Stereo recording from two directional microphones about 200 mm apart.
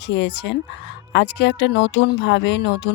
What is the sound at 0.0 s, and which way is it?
Speech, 60° left (ahead or behind).